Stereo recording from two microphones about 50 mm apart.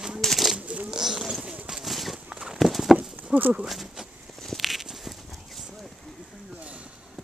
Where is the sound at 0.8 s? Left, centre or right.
Centre.